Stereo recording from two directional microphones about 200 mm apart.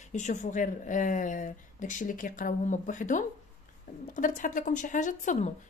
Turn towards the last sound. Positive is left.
turn(degrees=40)  # may be behind; listen again after turning